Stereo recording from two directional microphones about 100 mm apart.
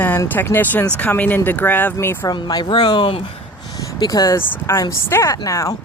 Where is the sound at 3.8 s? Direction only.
40° left (ahead or behind).